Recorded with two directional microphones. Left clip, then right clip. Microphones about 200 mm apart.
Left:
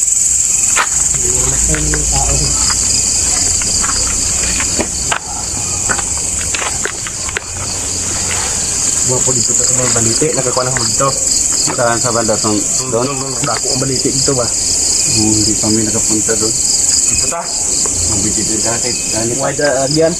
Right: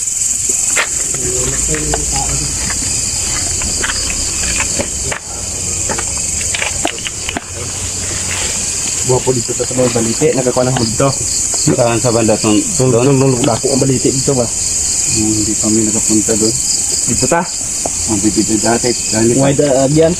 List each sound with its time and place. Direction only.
9.9 s speech: 20° right (ahead or behind)
12.1 s speech: 15° right (ahead or behind)
13.1 s speech: 35° right (ahead or behind)
19.4 s speech: 20° right (ahead or behind)